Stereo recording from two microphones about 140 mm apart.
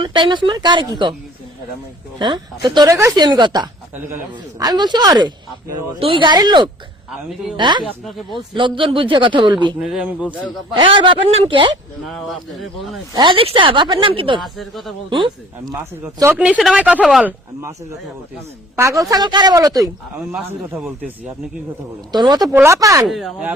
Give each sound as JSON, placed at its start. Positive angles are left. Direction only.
{"t": 0.0, "sound": "a woman's voice", "side_deg": -35}
{"t": 2.1, "sound": "a woman's voice", "side_deg": -35}
{"t": 9.8, "sound": "speech", "side_deg": -5}
{"t": 10.8, "sound": "a woman's voice", "side_deg": -35}
{"t": 12.0, "sound": "speech", "side_deg": 0}
{"t": 13.1, "sound": "a woman's voice", "side_deg": -35}
{"t": 14.4, "sound": "speech", "side_deg": 0}
{"t": 15.1, "sound": "speech", "side_deg": -30}
{"t": 16.4, "sound": "speech", "side_deg": -5}
{"t": 17.2, "sound": "speech", "side_deg": -20}
{"t": 18.8, "sound": "speech", "side_deg": -20}
{"t": 22.1, "sound": "speech", "side_deg": -30}
{"t": 22.5, "sound": "speech", "side_deg": -20}
{"t": 23.0, "sound": "speech", "side_deg": 0}